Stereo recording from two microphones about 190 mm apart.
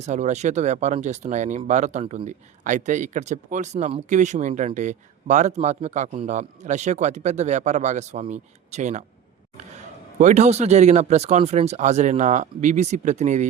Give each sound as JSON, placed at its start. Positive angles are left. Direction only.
{"t": 0.0, "sound": "speech", "side_deg": -40}
{"t": 10.2, "sound": "speech", "side_deg": -40}